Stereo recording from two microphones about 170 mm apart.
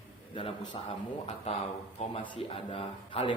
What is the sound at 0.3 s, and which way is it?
Speech, 30° left (ahead or behind).